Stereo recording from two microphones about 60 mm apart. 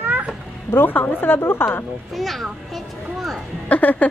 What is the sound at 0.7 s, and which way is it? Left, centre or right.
Speech, left.